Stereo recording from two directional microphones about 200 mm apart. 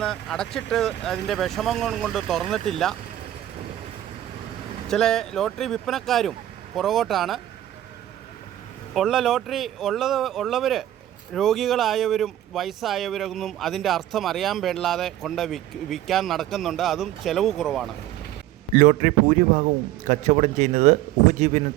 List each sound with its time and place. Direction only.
0.0 s speech: 5° left (ahead or behind)
4.9 s speech: centre (ahead or behind)
9.0 s speech: centre (ahead or behind)
18.7 s speech: 40° right (ahead or behind)